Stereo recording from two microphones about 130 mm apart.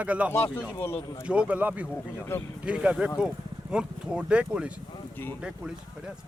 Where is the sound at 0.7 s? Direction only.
20° left (ahead or behind).